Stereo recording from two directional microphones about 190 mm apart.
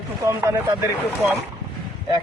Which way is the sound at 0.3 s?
15° right (ahead or behind).